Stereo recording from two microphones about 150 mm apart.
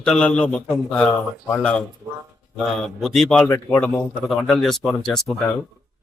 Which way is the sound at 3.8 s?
5° left (ahead or behind).